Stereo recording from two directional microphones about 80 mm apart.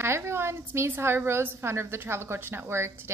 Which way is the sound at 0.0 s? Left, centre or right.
Right.